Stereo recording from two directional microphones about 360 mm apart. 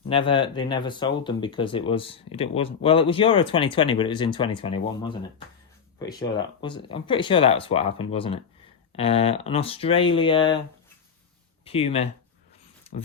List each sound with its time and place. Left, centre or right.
0.1 s speech: centre
11.6 s speech: centre
12.9 s a sound: centre